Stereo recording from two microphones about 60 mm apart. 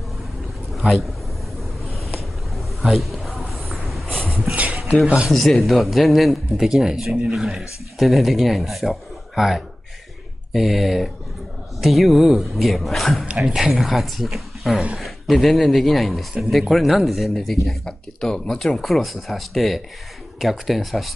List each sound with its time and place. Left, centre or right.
0.7 s a man's voice: centre
2.8 s a sound: centre
5.0 s speech: centre
5.3 s speech: centre